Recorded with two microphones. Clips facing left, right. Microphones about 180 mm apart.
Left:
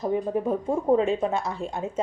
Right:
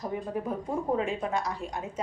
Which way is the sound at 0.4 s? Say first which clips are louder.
Left 6 dB; 25° left (ahead or behind).